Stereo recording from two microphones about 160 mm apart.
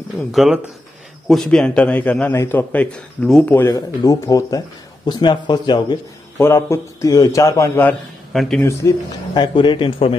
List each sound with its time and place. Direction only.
0.3 s a man's voice: centre (ahead or behind)
3.5 s speech: 20° left (ahead or behind)
6.3 s a man's voice: 15° left (ahead or behind)
8.3 s speech: 5° left (ahead or behind)
8.6 s speech: 20° left (ahead or behind); by 10.1 s 35° left (ahead or behind)